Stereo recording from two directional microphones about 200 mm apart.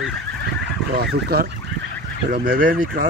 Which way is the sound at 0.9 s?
50° right (ahead or behind).